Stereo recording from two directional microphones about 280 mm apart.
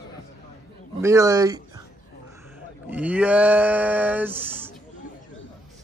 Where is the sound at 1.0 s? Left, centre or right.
Centre.